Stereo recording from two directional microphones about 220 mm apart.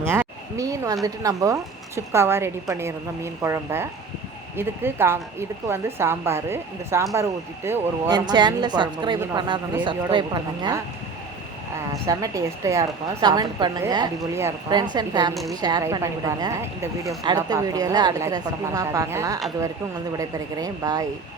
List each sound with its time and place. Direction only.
0.0 s a woman's voice: 10° right (ahead or behind)
12.0 s a woman's voice: 15° right (ahead or behind)